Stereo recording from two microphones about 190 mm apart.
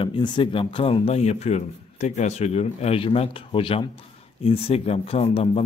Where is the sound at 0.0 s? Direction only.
25° left (ahead or behind).